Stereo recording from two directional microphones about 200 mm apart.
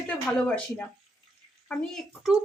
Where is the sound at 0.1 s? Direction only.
5° left (ahead or behind).